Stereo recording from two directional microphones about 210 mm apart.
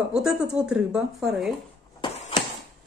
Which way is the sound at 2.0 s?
30° left (ahead or behind).